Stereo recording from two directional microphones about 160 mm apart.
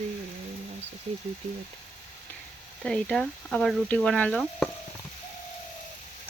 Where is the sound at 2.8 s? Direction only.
5° left (ahead or behind).